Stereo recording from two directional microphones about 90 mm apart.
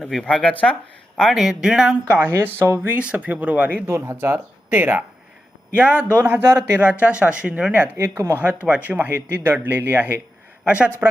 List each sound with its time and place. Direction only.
0.1 s speech: 5° left (ahead or behind)
2.1 s speech: 20° right (ahead or behind)
7.0 s speech: 10° right (ahead or behind)
7.9 s speech: 30° right (ahead or behind)